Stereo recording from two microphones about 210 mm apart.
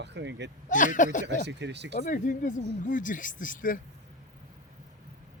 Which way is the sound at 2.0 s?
35° left (ahead or behind).